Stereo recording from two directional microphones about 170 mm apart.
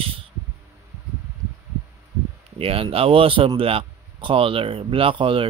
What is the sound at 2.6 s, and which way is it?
Speech, 35° right (ahead or behind).